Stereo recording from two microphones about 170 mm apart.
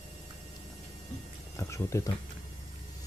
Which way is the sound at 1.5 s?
15° left (ahead or behind).